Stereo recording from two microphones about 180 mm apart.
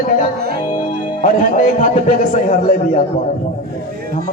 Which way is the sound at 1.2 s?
40° left (ahead or behind).